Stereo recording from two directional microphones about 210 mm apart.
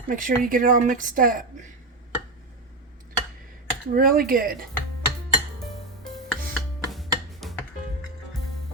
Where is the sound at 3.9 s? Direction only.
45° right (ahead or behind).